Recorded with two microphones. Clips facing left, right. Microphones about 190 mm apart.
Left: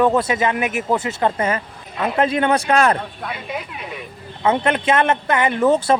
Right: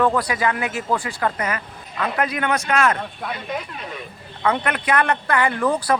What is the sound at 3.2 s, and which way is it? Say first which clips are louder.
Speech: even; 5° left (ahead or behind).